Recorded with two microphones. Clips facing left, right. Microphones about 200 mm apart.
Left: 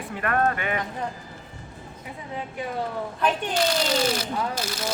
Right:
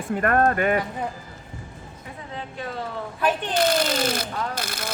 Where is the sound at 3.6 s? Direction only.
50° right (ahead or behind).